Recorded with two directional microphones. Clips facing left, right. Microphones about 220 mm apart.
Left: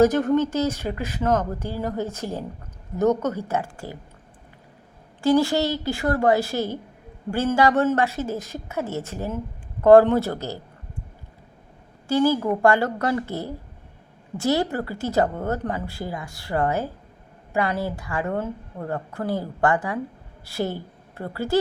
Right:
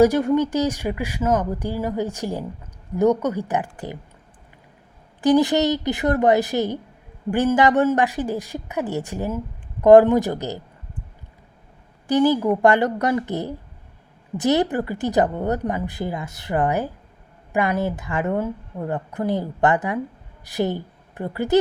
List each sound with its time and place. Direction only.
0.0 s speech: 10° right (ahead or behind)
5.2 s a woman's voice: 20° right (ahead or behind)
12.0 s a woman's voice: 20° right (ahead or behind)